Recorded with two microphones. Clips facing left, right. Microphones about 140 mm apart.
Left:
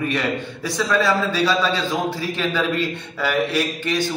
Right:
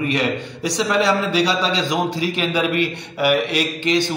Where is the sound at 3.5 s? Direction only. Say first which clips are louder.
Right 3 dB; 85° right.